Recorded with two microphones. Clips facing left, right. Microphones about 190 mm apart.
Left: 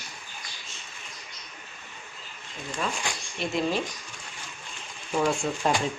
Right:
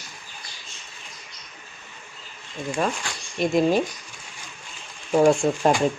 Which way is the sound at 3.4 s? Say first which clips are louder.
Right 8 dB; 45° right (ahead or behind).